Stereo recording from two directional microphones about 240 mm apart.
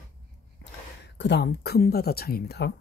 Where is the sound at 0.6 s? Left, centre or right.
Left.